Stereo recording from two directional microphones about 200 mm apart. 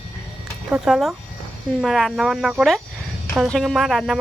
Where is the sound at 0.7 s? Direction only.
Centre (ahead or behind).